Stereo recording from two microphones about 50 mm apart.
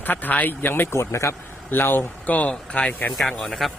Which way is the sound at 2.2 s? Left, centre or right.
Left.